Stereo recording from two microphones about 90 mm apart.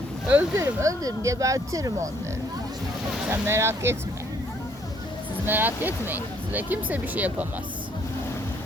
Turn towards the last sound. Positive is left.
turn(degrees=-15)  # may be behind; listen again after turning